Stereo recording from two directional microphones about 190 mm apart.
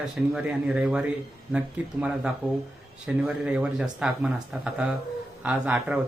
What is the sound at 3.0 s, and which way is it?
Speech, 5° right (ahead or behind).